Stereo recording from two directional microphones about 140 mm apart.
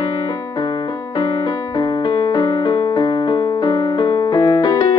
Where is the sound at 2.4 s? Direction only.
30° left (ahead or behind).